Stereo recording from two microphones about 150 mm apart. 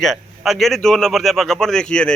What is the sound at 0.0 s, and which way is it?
Speech, centre (ahead or behind).